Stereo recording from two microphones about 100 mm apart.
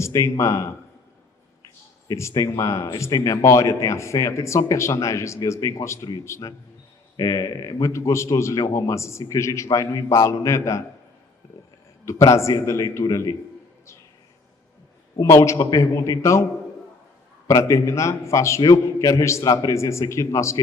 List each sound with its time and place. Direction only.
0.0 s a man's voice: 30° left (ahead or behind)
2.0 s a man's voice: 35° left (ahead or behind)
12.0 s a man's voice: 30° left (ahead or behind)
15.2 s a man's voice: 30° left (ahead or behind)
17.5 s a man's voice: 30° left (ahead or behind)